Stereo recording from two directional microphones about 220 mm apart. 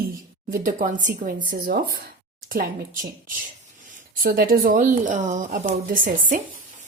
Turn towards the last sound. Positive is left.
turn(degrees=-40)  # may be behind; listen again after turning